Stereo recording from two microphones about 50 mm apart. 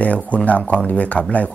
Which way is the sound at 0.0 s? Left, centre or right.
Left.